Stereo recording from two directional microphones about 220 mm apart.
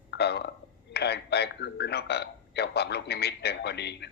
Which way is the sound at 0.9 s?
50° left (ahead or behind).